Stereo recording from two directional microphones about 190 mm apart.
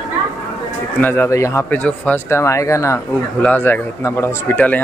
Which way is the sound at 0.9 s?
10° left (ahead or behind).